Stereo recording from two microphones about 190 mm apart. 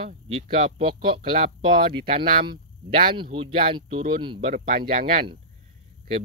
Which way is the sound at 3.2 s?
30° right (ahead or behind).